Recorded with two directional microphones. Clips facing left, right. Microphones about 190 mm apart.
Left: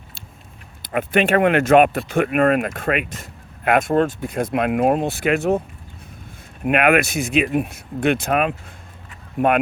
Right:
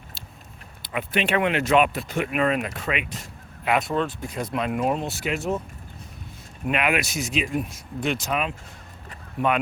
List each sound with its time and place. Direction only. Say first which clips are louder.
0.8 s speech: left 7 dB; 50° left (ahead or behind)
6.7 s speech: left 7 dB; 55° left (ahead or behind)